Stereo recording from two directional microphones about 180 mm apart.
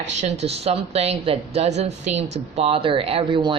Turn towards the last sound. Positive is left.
turn(degrees=-30)  # may be behind; listen again after turning